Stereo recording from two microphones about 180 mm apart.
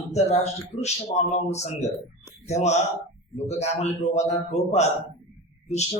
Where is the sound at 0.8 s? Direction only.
40° left (ahead or behind).